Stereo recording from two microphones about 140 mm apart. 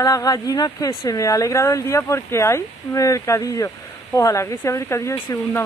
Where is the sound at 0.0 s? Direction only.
25° left (ahead or behind).